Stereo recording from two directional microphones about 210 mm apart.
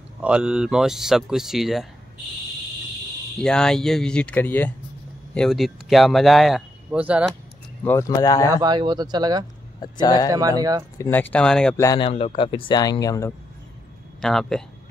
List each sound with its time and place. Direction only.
0.2 s speech: 5° right (ahead or behind)
3.3 s speech: 5° left (ahead or behind)
7.8 s speech: 15° left (ahead or behind)
8.5 s speech: 20° right (ahead or behind)
9.8 s speech: 20° left (ahead or behind)
10.3 s speech: 15° right (ahead or behind)
11.0 s speech: 10° left (ahead or behind)
11.8 s speech: 15° left (ahead or behind)
14.2 s speech: centre (ahead or behind)